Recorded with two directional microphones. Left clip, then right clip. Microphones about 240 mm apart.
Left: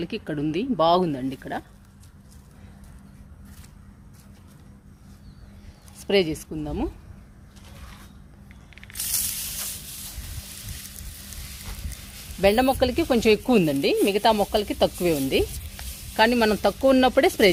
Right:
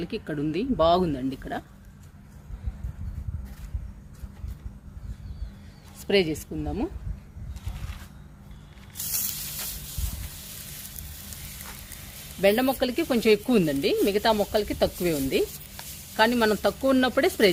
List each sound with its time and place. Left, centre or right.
0.0 s speech: left
6.0 s speech: left
12.4 s speech: left